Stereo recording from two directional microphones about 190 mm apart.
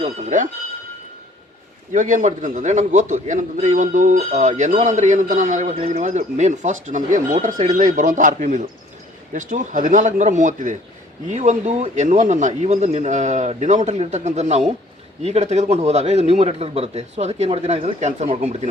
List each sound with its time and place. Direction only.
0.0 s speech: 40° right (ahead or behind)
1.9 s a man's voice: 45° right (ahead or behind)